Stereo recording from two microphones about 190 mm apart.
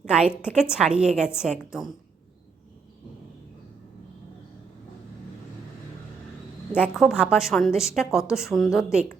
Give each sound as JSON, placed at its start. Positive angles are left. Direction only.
{"t": 0.0, "sound": "a woman's voice", "side_deg": -5}
{"t": 6.7, "sound": "a woman's voice", "side_deg": -5}